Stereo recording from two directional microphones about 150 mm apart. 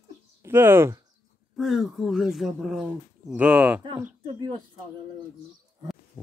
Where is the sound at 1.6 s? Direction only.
Centre (ahead or behind).